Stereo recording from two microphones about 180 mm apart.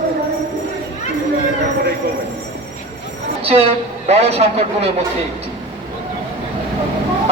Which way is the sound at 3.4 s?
35° right (ahead or behind).